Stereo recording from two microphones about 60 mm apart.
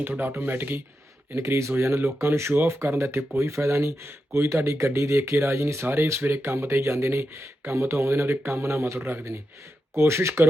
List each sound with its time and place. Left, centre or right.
0.2 s speech: right
1.4 s speech: right